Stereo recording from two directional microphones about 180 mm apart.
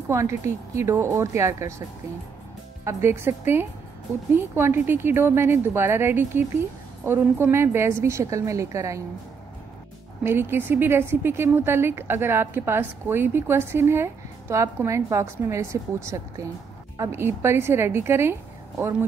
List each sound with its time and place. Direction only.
0.1 s speech: 15° right (ahead or behind)
2.8 s speech: 15° right (ahead or behind)
10.2 s speech: 10° right (ahead or behind)